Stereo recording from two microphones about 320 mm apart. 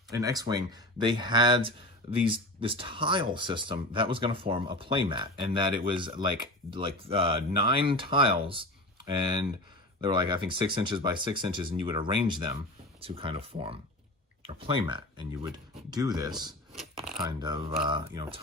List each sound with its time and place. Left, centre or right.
0.1 s speech: centre